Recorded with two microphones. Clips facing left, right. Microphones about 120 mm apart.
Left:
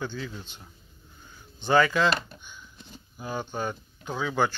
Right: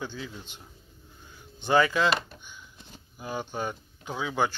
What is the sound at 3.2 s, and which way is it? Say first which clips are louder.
Speech: left 1 dB; 5° right (ahead or behind).